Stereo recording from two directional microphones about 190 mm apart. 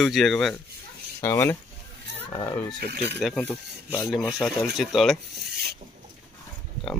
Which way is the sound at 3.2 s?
Centre (ahead or behind).